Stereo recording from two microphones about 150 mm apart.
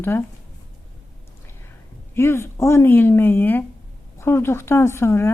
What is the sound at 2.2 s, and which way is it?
Speech, 15° left (ahead or behind).